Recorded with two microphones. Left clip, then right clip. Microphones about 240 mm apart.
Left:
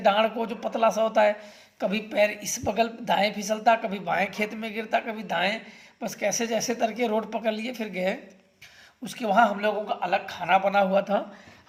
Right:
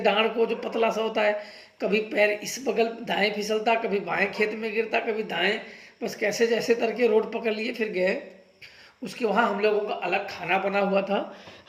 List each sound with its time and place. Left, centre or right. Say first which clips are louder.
0.0 s a woman's voice: even; left